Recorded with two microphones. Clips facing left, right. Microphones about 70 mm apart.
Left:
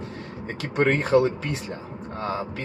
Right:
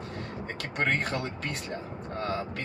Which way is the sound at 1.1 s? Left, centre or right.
Centre.